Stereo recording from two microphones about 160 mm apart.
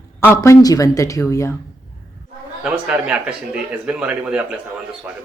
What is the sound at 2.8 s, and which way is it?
Speech, 5° right (ahead or behind).